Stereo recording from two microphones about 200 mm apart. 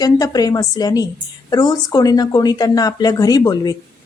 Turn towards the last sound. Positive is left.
turn(degrees=20)  # may be behind; listen again after turning